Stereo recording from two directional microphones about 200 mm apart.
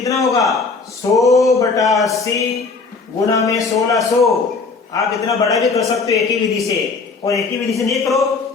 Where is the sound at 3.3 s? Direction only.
15° left (ahead or behind).